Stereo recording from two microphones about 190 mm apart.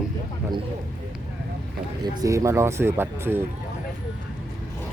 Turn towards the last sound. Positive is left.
turn(degrees=-10)  # may be behind; listen again after turning